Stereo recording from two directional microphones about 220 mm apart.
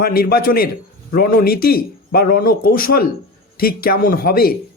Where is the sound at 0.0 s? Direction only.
45° left (ahead or behind).